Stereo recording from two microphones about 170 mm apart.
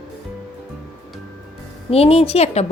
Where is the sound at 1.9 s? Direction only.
35° left (ahead or behind).